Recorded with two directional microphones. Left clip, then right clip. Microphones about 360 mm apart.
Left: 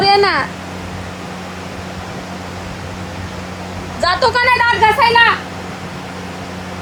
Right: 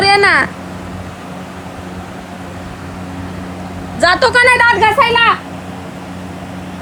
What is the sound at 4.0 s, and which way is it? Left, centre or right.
A woman's voice, right.